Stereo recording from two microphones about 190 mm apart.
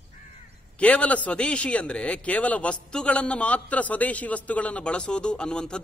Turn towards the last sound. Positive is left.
turn(degrees=5)  # may be behind; listen again after turning